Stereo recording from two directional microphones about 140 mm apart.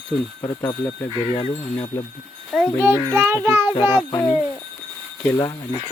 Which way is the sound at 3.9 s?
25° left (ahead or behind).